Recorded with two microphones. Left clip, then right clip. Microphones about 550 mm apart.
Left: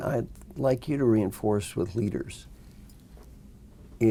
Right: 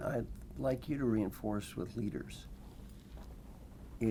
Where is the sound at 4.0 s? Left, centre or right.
Left.